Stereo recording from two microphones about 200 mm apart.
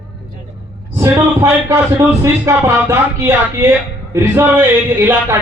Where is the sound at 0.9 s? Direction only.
15° right (ahead or behind).